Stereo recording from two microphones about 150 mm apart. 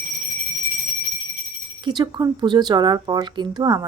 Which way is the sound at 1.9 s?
30° right (ahead or behind).